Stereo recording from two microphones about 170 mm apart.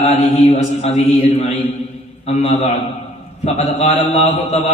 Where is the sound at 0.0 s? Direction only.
40° left (ahead or behind).